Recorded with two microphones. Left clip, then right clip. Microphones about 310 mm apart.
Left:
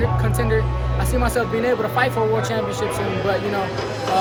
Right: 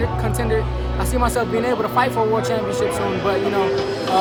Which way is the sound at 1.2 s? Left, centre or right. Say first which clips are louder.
Right 1 dB; centre.